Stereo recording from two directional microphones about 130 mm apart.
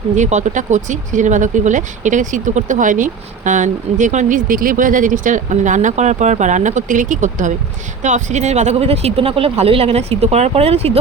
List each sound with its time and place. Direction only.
0.2 s speech: 65° right (ahead or behind)